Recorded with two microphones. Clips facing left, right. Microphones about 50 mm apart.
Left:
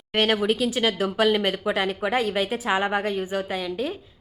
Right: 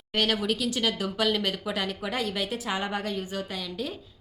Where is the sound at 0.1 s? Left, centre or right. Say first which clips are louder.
Left 5 dB; left.